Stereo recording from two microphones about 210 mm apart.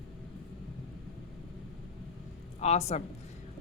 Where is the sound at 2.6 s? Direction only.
30° left (ahead or behind).